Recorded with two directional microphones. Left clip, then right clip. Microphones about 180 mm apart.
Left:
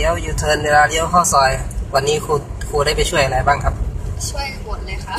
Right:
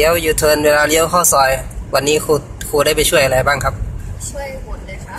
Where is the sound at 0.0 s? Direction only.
50° right (ahead or behind).